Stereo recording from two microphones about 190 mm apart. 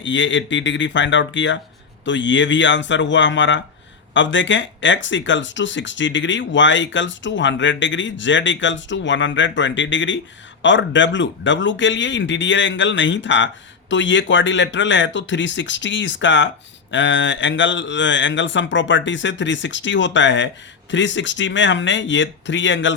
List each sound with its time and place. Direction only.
0.0 s speech: 75° left (ahead or behind)